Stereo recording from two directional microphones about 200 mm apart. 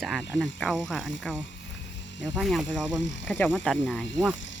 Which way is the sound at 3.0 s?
65° left (ahead or behind).